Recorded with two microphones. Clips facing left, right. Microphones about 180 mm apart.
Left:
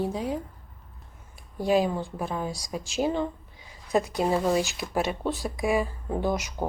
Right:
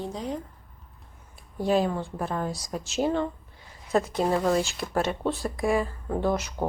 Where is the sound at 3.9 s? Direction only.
15° left (ahead or behind).